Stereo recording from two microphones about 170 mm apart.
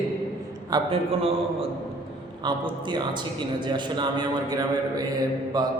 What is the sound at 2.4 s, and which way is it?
A man's voice, 25° right (ahead or behind).